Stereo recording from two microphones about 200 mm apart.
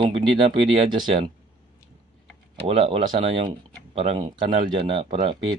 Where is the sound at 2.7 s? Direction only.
30° right (ahead or behind).